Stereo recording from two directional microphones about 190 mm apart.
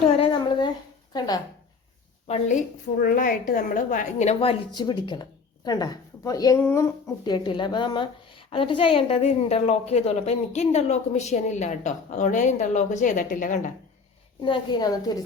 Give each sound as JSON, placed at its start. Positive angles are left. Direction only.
{"t": 0.0, "sound": "a sound", "side_deg": 30}
{"t": 2.2, "sound": "a woman's voice", "side_deg": 40}
{"t": 7.3, "sound": "a woman's voice", "side_deg": 25}
{"t": 14.4, "sound": "a woman's voice", "side_deg": 25}